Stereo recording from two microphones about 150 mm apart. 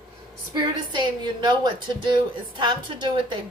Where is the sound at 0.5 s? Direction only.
30° right (ahead or behind).